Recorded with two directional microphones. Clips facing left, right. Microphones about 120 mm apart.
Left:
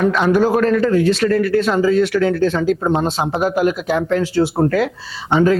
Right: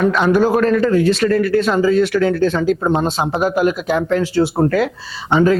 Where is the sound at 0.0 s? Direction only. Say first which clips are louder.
Right 1 dB; 25° right (ahead or behind).